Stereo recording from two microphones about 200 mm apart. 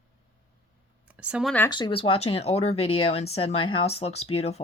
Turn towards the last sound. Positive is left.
turn(degrees=30)  # may be behind; listen again after turning